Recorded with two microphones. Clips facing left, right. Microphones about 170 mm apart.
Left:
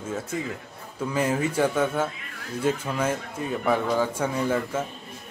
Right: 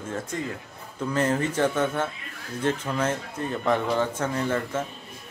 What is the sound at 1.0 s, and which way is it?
Speech, 10° left (ahead or behind).